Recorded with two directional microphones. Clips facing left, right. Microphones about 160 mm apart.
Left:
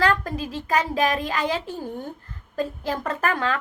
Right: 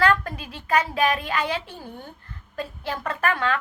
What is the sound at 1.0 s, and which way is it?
Speech, 40° left (ahead or behind).